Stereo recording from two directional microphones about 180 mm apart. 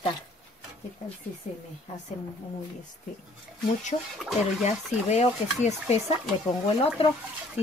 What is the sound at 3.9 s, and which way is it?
Speech, 35° left (ahead or behind).